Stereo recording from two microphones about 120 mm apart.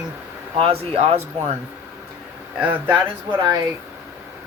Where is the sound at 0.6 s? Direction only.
55° right (ahead or behind).